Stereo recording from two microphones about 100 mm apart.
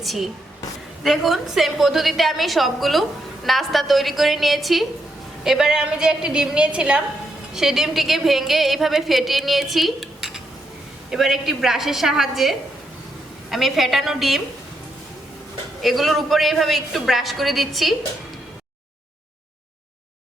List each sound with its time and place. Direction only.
0.0 s a woman's voice: centre (ahead or behind)
15.8 s a woman's voice: centre (ahead or behind)